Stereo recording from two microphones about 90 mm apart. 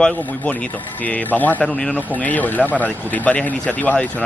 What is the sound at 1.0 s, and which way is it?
Speech, 20° left (ahead or behind).